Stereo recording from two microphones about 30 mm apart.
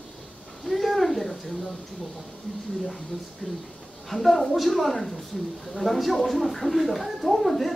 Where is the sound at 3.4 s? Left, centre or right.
Left.